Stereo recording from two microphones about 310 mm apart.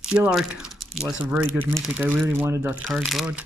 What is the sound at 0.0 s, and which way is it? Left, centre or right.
Speech, centre.